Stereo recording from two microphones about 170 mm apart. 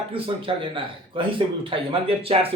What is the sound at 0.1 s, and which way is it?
Speech, 30° right (ahead or behind).